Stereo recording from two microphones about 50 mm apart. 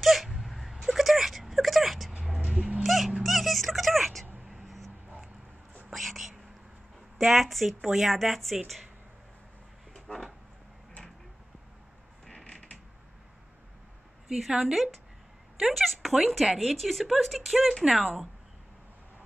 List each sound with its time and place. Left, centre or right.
0.0 s whimper: centre
2.1 s vehicle: centre
2.8 s dog: centre
3.3 s music: centre
4.5 s vehicle: centre
5.9 s whispering: centre
7.2 s speech: centre
9.9 s a sound: centre
12.4 s creak: left
14.2 s speech: centre